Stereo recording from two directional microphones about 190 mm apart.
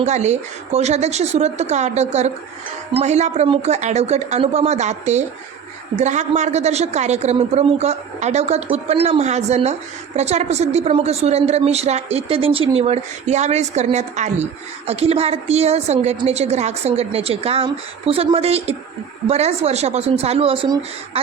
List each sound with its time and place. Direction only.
0.0 s a woman's voice: 35° right (ahead or behind)